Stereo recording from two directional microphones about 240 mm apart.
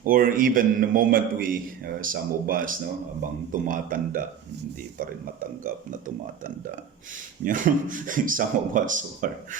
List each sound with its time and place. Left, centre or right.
0.0 s a man's voice: right
7.4 s a man's voice: right